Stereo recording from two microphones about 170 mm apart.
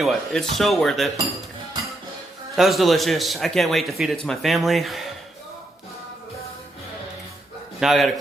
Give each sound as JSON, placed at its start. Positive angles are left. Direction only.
{"t": 0.0, "sound": "a man's voice", "side_deg": 0}
{"t": 2.6, "sound": "a man's voice", "side_deg": 0}
{"t": 7.8, "sound": "a man's voice", "side_deg": 0}